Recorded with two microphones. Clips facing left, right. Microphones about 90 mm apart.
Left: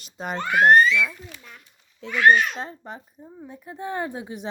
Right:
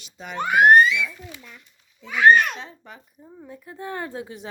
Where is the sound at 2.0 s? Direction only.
15° right (ahead or behind).